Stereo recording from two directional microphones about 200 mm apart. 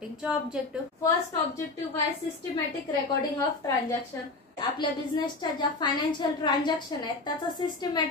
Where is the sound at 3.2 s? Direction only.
15° left (ahead or behind).